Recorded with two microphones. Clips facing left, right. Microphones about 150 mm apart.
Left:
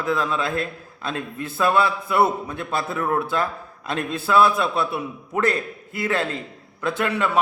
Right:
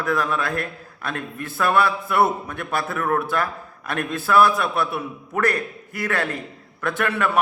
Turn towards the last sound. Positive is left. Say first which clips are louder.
# even
turn(degrees=25)  # may be behind; listen again after turning